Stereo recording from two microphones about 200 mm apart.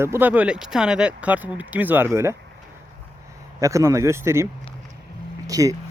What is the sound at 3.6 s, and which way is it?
Speech, 15° right (ahead or behind).